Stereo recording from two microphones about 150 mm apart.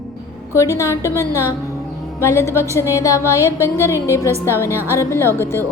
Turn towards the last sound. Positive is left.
turn(degrees=15)  # may be behind; listen again after turning